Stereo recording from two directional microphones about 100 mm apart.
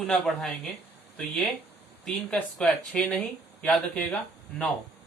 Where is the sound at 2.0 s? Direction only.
5° left (ahead or behind).